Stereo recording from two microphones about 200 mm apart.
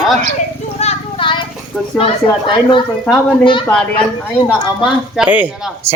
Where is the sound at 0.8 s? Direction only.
30° left (ahead or behind).